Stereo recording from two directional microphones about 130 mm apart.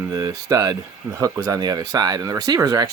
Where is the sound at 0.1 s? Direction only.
25° right (ahead or behind).